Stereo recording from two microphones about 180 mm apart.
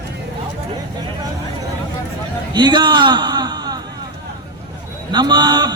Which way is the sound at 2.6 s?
25° right (ahead or behind).